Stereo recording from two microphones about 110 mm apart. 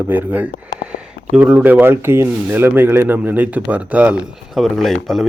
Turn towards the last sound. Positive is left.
turn(degrees=0)  # may be behind; listen again after turning